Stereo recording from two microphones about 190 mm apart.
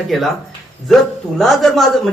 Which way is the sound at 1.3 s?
Centre (ahead or behind).